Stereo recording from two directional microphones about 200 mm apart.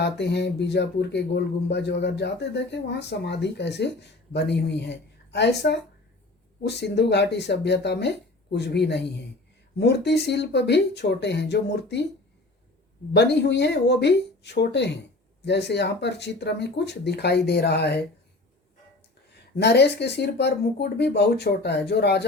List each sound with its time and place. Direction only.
0.0 s speech: 60° left (ahead or behind)
13.1 s speech: 60° left (ahead or behind)
19.3 s speech: 55° left (ahead or behind)